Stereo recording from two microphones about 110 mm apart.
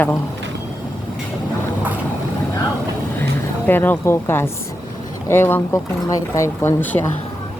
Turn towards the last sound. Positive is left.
turn(degrees=15)  # may be behind; listen again after turning